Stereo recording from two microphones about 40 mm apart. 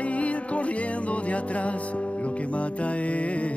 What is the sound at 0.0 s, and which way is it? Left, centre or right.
Music, left.